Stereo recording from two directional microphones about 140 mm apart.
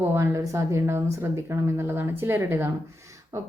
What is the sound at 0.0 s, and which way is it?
Speech, 20° right (ahead or behind).